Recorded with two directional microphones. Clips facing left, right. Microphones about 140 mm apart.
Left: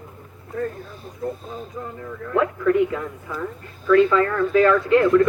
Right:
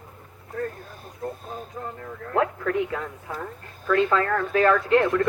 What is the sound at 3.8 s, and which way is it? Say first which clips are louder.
Speech: left 6 dB; 45° right (ahead or behind).